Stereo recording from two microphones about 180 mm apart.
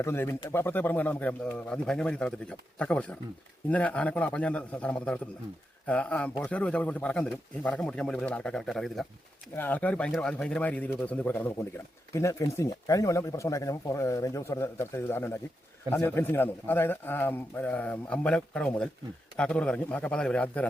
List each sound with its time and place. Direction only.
0.0 s speech: 15° left (ahead or behind)